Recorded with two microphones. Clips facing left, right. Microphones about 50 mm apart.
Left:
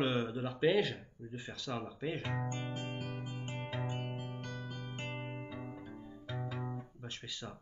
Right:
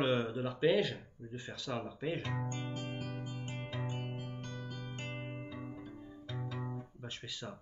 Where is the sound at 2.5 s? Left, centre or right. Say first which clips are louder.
Even; centre.